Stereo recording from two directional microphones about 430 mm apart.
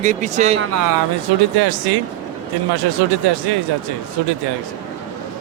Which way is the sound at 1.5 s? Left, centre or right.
Right.